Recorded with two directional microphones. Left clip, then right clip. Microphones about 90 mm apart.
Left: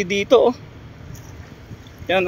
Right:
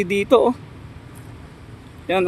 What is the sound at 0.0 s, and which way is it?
Speech, 40° right (ahead or behind).